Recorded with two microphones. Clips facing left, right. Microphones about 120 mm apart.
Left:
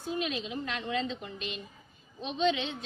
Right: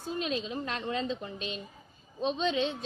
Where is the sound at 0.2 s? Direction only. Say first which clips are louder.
Right 1 dB; 35° right (ahead or behind).